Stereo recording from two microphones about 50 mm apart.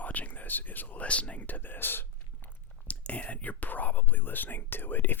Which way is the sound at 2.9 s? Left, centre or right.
Left.